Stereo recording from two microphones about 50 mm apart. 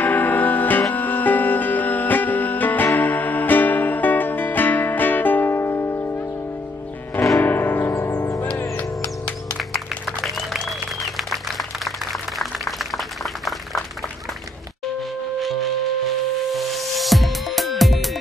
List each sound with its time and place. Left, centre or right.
0.0 s music: left
5.6 s music: left
7.3 s music: left
11.1 s music: centre
16.5 s music: centre